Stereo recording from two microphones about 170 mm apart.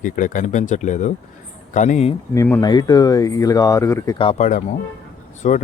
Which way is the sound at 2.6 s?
25° left (ahead or behind).